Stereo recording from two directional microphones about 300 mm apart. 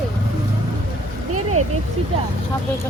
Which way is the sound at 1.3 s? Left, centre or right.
Right.